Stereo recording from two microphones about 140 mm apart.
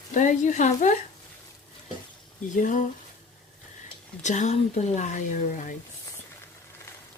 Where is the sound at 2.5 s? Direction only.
65° left (ahead or behind).